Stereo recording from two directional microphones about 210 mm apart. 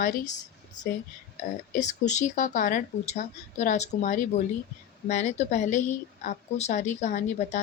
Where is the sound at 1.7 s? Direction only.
35° left (ahead or behind).